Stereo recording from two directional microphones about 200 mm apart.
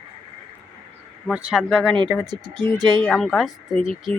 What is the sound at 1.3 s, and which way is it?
Speech, 5° right (ahead or behind).